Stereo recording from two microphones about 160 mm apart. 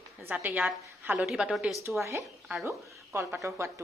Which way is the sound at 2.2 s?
Centre (ahead or behind).